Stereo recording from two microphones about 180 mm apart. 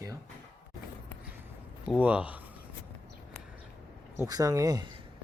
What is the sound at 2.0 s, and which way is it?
Speech, 5° right (ahead or behind).